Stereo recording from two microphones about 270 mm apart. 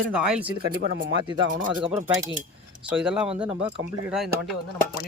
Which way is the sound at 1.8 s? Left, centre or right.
Centre.